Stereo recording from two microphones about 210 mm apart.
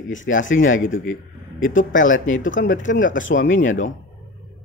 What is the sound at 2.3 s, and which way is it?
Speech, 65° left (ahead or behind).